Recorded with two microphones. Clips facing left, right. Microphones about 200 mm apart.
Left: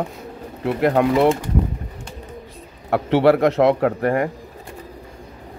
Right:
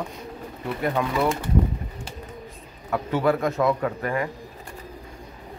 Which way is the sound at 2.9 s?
75° left (ahead or behind).